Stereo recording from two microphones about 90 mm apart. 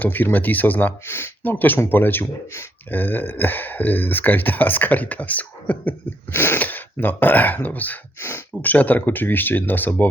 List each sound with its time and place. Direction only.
0.0 s speech: 20° left (ahead or behind)